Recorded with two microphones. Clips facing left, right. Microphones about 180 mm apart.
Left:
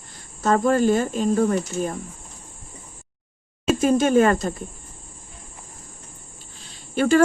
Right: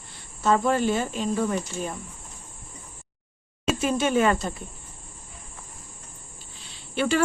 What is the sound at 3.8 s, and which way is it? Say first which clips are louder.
Speech: left 5 dB; 45° left (ahead or behind).